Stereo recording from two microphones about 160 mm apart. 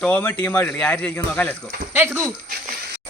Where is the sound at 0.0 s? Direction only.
10° left (ahead or behind).